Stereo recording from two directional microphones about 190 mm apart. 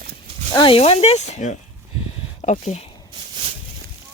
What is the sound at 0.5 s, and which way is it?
Speech, 25° left (ahead or behind).